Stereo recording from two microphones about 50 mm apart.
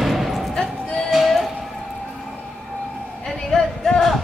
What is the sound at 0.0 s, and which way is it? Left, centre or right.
Basketball bounce, centre.